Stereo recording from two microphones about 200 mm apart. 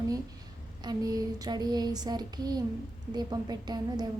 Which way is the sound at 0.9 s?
20° right (ahead or behind).